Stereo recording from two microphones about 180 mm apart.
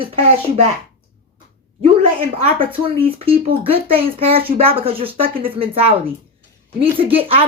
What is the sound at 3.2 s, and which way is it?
Speech, 30° right (ahead or behind).